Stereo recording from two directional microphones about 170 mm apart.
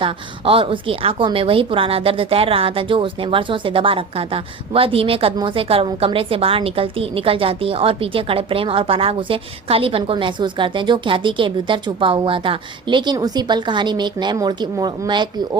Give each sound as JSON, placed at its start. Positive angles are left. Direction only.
{"t": 0.0, "sound": "a woman's voice", "side_deg": -30}